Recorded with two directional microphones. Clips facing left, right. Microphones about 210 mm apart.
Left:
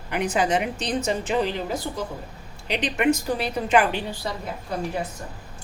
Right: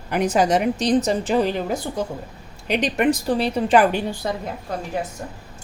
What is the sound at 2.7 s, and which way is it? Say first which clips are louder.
Speech: right 5 dB; 45° right (ahead or behind).